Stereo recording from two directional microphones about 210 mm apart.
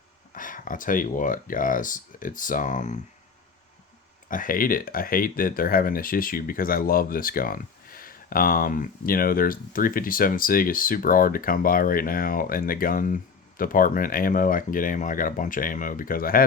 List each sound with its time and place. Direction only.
0.3 s speech: 40° left (ahead or behind)
4.3 s speech: 40° left (ahead or behind)